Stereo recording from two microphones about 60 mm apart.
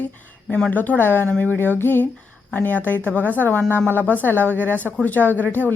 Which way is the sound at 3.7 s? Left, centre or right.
Right.